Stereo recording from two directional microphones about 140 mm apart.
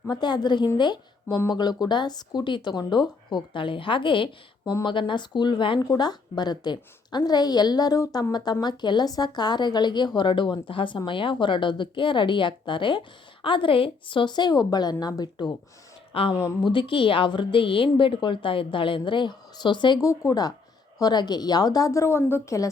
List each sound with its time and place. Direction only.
0.1 s a woman's voice: 30° left (ahead or behind)